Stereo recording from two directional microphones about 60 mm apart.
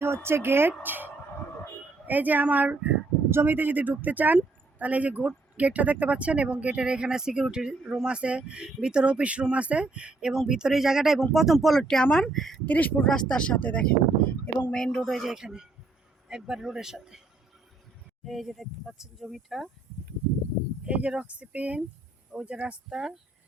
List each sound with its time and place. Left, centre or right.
0.0 s speech: right
3.2 s speech: right; by 8.0 s centre
8.0 s speech: centre
12.6 s speech: left
13.1 s speech: centre; by 14.7 s left
14.7 s speech: centre
15.3 s speech: centre
18.3 s speech: centre
20.8 s speech: centre
22.9 s speech: centre